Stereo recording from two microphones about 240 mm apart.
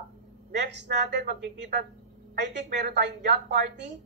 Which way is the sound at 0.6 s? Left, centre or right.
Right.